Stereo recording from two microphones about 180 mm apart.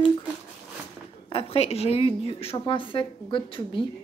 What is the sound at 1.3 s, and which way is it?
Speech, 35° left (ahead or behind).